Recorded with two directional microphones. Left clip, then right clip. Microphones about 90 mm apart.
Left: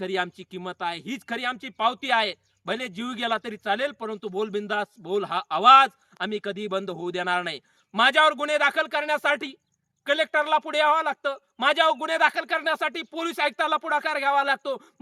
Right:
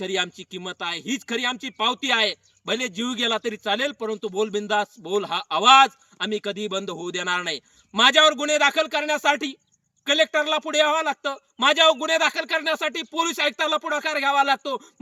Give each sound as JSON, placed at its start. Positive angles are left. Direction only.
{"t": 0.0, "sound": "speech", "side_deg": 40}